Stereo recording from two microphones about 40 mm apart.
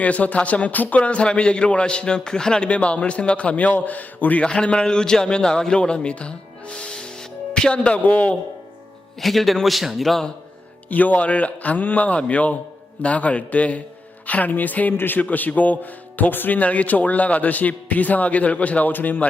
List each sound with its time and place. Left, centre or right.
0.0 s speech: left; by 2.6 s centre
2.6 s speech: left
3.8 s a man's voice: left
4.4 s a man's voice: left
7.7 s speech: left
9.2 s a man's voice: centre
10.8 s a man's voice: left
14.9 s speech: left
15.2 s a man's voice: left
16.6 s speech: left